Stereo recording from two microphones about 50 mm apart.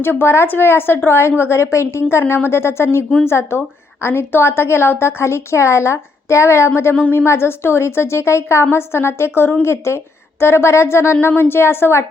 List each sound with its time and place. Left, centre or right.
0.0 s a woman's voice: left
11.3 s a woman's voice: left